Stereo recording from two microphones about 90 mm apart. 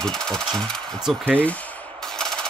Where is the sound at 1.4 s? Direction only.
15° left (ahead or behind).